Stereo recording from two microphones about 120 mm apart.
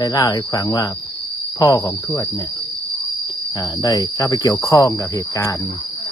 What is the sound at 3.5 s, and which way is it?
Cricket, 35° left (ahead or behind).